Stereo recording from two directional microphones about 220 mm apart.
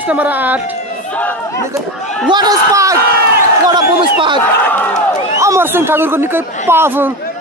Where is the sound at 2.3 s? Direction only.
15° right (ahead or behind).